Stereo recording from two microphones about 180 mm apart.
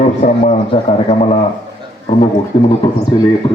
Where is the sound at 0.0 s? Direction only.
40° left (ahead or behind).